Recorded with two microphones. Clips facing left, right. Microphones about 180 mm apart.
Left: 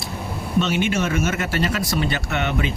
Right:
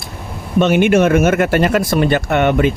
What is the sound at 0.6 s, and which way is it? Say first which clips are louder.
Speech: right 13 dB; 55° right (ahead or behind).